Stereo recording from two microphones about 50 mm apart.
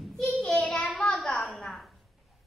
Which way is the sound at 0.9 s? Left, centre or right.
Centre.